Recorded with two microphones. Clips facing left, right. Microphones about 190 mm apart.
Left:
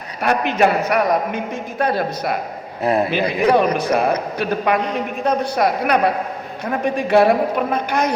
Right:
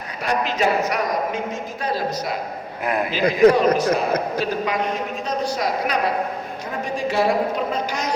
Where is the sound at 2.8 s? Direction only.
30° left (ahead or behind).